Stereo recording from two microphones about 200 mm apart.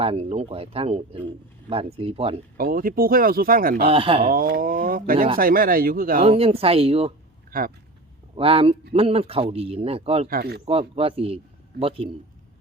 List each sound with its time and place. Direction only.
0.0 s speech: 30° right (ahead or behind)
2.6 s speech: 45° right (ahead or behind)
3.8 s speech: 25° right (ahead or behind)
4.3 s speech: 45° right (ahead or behind)
6.2 s speech: 30° right (ahead or behind)
7.5 s speech: 45° right (ahead or behind)
8.4 s speech: 30° right (ahead or behind)
10.2 s speech: 50° right (ahead or behind)
10.7 s speech: 30° right (ahead or behind)